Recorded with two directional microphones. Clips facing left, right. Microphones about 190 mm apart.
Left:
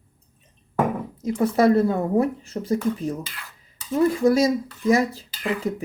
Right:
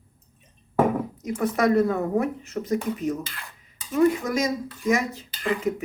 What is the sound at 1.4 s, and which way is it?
Speech, 30° left (ahead or behind).